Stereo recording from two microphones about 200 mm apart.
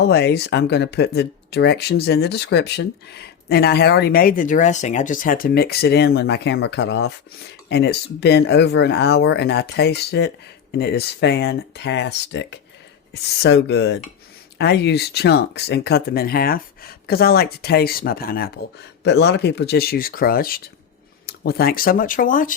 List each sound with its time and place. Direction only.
0.0 s speech: 55° left (ahead or behind)